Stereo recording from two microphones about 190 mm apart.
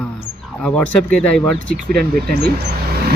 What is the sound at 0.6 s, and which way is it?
Speech, 5° left (ahead or behind).